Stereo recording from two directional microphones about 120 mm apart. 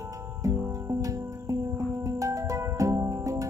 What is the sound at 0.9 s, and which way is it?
Music, 30° right (ahead or behind).